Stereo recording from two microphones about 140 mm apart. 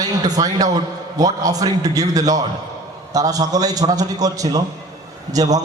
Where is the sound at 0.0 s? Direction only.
25° right (ahead or behind).